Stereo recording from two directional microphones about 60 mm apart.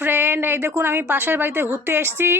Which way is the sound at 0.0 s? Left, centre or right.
Right.